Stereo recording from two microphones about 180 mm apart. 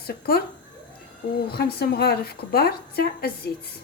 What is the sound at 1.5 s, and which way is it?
A woman's voice, 60° left (ahead or behind).